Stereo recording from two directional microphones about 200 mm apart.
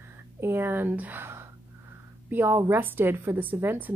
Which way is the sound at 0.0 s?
10° right (ahead or behind).